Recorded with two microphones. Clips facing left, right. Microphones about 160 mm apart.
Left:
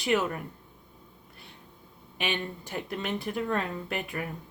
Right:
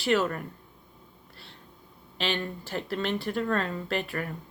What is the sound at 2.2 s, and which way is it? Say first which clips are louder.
Speech: right 2 dB; 15° left (ahead or behind).